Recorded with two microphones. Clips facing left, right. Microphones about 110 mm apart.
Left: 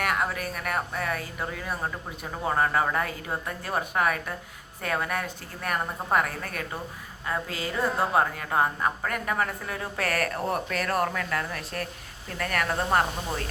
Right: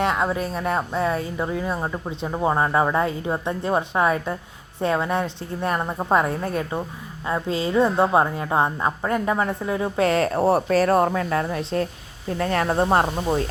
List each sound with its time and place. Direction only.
0.0 s a woman's voice: 25° right (ahead or behind)